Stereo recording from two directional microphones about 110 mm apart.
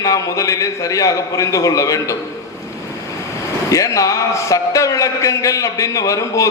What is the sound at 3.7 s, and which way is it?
A man's voice, 30° left (ahead or behind).